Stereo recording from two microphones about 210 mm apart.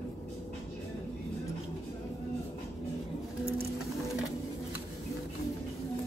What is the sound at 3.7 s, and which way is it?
Sewing machine, centre (ahead or behind).